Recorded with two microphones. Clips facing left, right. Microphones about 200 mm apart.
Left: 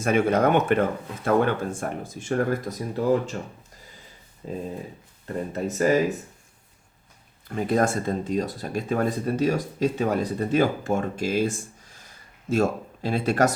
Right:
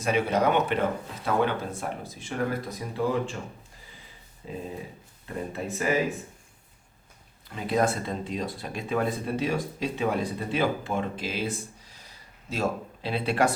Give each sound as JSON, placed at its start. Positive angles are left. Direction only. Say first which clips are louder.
{"t": 0.0, "sound": "speech", "louder": "left 4 dB", "side_deg": 50}
{"t": 4.4, "sound": "speech", "louder": "left 4 dB", "side_deg": 45}
{"t": 7.4, "sound": "speech", "louder": "left 3 dB", "side_deg": 50}